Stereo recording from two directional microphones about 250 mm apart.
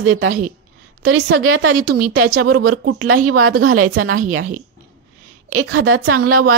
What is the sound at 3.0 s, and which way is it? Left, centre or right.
A woman's voice, right.